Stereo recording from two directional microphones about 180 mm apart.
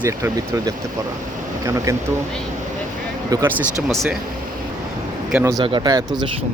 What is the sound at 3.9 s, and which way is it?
Speech, centre (ahead or behind).